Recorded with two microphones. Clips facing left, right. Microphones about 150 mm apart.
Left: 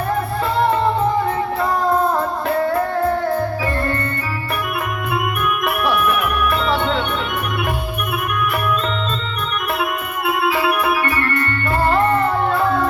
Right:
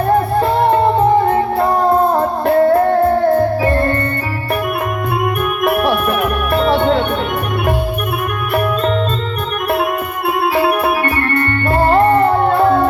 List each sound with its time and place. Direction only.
0.3 s music: 40° right (ahead or behind)
1.9 s music: 30° right (ahead or behind)
5.6 s music: 40° right (ahead or behind)
10.2 s music: 35° right (ahead or behind)